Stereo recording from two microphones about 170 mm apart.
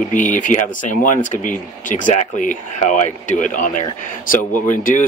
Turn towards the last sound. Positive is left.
turn(degrees=50)  # may be behind; listen again after turning